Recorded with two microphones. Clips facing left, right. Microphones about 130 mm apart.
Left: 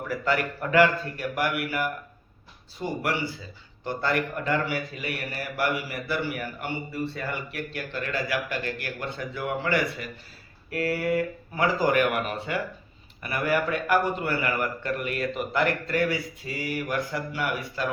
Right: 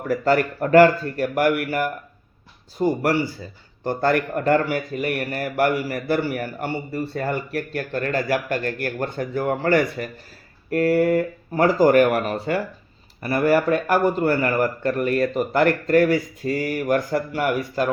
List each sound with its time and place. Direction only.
0.1 s a man's voice: 45° right (ahead or behind)